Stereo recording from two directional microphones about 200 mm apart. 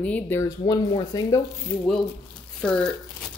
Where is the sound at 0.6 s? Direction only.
20° left (ahead or behind).